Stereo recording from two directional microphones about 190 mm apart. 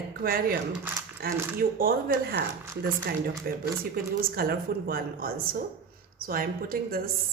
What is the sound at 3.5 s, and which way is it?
A woman's voice, 50° right (ahead or behind).